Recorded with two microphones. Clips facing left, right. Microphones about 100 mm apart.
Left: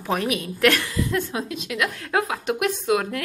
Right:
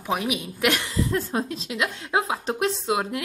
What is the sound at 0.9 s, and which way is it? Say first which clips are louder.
A woman's voice: even; 30° right (ahead or behind).